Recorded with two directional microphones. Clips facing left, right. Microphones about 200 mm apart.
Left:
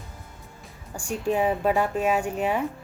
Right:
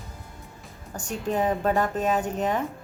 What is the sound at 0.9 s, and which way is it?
A woman's voice, 5° left (ahead or behind).